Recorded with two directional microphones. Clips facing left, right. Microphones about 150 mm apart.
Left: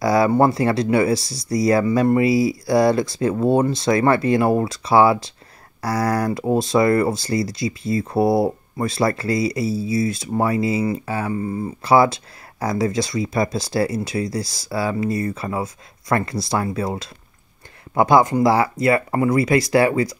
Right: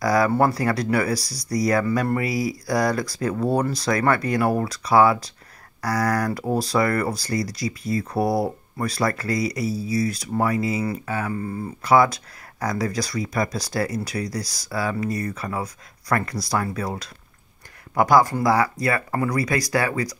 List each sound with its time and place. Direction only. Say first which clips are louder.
0.0 s speech: left 3 dB; 25° left (ahead or behind)
11.3 s speech: left 4 dB; 15° left (ahead or behind)
11.8 s speech: left 2 dB; 30° left (ahead or behind)